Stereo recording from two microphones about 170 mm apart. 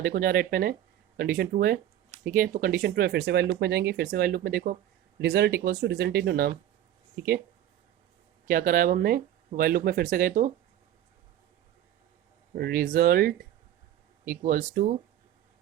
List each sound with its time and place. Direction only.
0.0 s speech: 55° right (ahead or behind)
5.2 s speech: 70° right (ahead or behind)
8.4 s speech: 55° right (ahead or behind)
12.5 s speech: 65° right (ahead or behind)